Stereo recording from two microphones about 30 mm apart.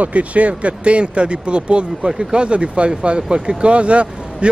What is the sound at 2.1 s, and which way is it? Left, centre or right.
Speech, right.